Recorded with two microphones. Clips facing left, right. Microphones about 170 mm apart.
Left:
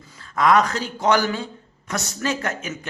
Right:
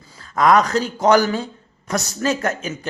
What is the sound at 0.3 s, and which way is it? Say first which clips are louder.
Speech: right 3 dB; 40° right (ahead or behind).